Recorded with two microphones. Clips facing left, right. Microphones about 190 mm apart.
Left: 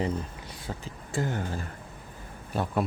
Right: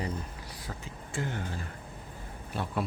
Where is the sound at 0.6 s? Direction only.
35° left (ahead or behind).